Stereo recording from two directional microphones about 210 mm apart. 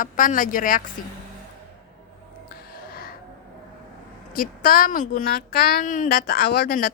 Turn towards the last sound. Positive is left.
turn(degrees=45)  # may be behind; listen again after turning